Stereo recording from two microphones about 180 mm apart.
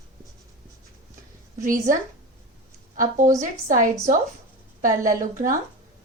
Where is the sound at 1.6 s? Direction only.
45° right (ahead or behind).